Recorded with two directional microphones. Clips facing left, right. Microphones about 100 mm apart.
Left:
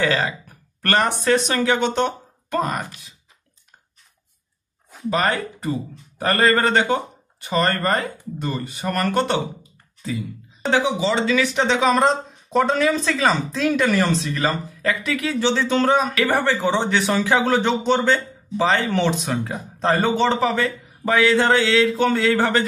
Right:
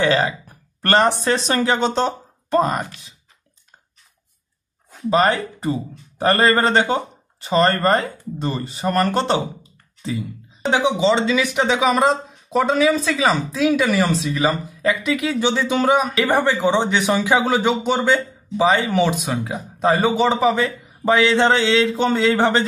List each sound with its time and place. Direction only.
0.0 s speech: 25° right (ahead or behind)
5.1 s speech: 25° right (ahead or behind)
10.7 s speech: 20° right (ahead or behind)
14.8 s speech: 20° right (ahead or behind)